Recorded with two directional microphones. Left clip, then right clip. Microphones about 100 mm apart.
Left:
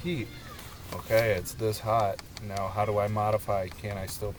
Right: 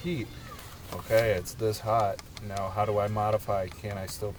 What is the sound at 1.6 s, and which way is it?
Speech, 20° left (ahead or behind).